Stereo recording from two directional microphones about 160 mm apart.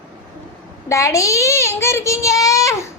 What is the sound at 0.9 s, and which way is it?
A child's voice, 20° left (ahead or behind).